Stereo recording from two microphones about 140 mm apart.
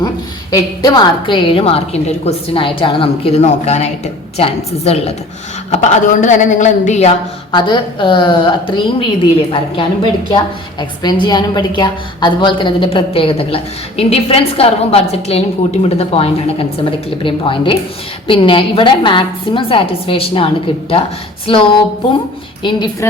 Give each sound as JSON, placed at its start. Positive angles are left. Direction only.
{"t": 0.5, "sound": "a woman's voice", "side_deg": 30}
{"t": 5.7, "sound": "a woman's voice", "side_deg": 55}
{"t": 7.5, "sound": "a woman's voice", "side_deg": 35}